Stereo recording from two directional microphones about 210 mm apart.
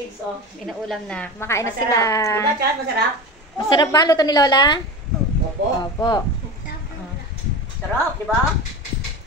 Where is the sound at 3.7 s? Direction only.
20° left (ahead or behind).